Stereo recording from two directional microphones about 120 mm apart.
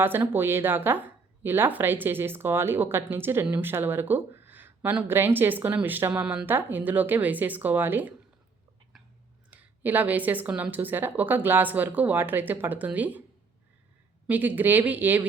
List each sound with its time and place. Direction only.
0.0 s speech: 15° right (ahead or behind)
9.5 s speech: 15° right (ahead or behind)
14.3 s speech: 15° right (ahead or behind)